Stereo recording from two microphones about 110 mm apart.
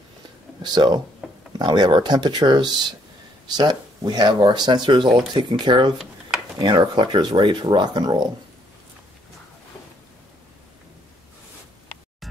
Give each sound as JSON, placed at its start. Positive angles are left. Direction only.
{"t": 0.6, "sound": "speech", "side_deg": -40}